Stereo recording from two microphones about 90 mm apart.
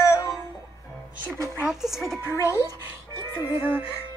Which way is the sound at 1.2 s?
35° right (ahead or behind).